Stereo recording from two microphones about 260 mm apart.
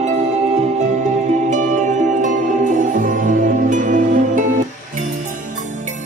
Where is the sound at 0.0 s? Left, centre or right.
Right.